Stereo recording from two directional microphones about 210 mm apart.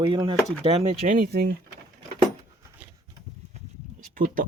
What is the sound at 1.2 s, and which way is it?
Speech, 45° right (ahead or behind).